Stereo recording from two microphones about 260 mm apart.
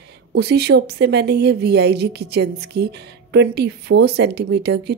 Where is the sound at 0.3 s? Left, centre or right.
Right.